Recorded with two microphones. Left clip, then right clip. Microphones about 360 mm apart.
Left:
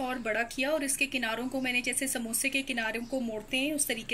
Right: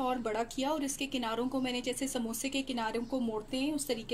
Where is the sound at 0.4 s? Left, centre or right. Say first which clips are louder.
Left 4 dB; centre.